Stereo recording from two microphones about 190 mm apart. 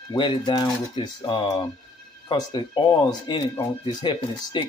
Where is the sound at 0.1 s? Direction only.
25° left (ahead or behind).